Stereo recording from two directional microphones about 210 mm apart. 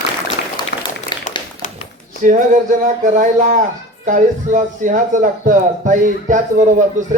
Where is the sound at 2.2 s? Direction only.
40° right (ahead or behind).